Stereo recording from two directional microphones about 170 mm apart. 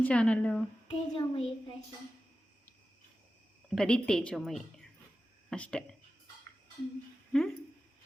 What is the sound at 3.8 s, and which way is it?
A woman's voice, 5° left (ahead or behind).